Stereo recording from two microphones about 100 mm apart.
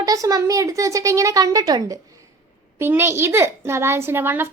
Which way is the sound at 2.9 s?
25° right (ahead or behind).